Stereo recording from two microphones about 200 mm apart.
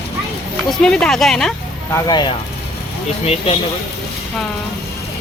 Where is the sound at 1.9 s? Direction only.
20° left (ahead or behind).